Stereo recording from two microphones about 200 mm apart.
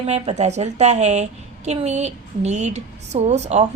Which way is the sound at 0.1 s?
35° right (ahead or behind).